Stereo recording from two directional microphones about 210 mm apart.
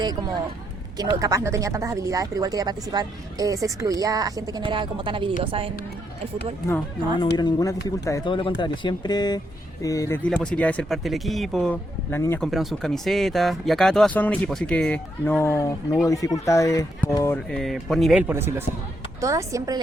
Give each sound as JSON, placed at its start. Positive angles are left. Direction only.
{"t": 0.9, "sound": "a woman's voice", "side_deg": -15}
{"t": 7.3, "sound": "speech", "side_deg": 15}
{"t": 10.2, "sound": "speech", "side_deg": 5}
{"t": 12.5, "sound": "speech", "side_deg": 0}
{"t": 17.5, "sound": "speech", "side_deg": 0}